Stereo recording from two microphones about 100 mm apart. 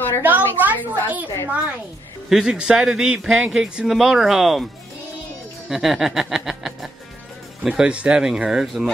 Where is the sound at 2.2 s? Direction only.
5° right (ahead or behind).